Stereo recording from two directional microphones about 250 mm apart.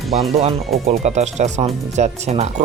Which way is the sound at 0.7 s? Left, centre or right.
Right.